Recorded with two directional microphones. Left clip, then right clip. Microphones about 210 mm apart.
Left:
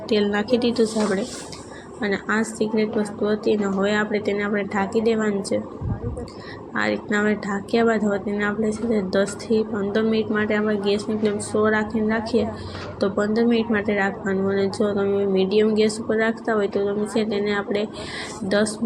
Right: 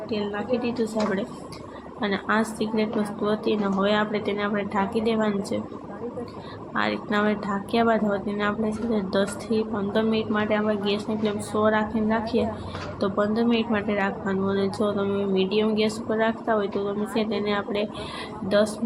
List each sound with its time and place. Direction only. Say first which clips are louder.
0.1 s a woman's voice: left 9 dB; 25° left (ahead or behind)
0.8 s speech: left 4 dB; centre (ahead or behind)
6.7 s speech: left 2 dB; 10° left (ahead or behind)